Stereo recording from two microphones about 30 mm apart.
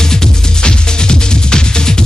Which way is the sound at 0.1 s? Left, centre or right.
Left.